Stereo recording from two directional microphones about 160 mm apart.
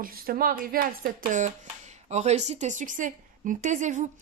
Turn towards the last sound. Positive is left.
turn(degrees=-50)  # may be behind; listen again after turning